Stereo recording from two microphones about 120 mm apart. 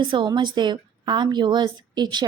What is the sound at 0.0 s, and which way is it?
A woman's voice, 40° right (ahead or behind).